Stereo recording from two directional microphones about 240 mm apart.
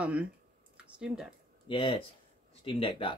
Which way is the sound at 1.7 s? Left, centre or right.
Left.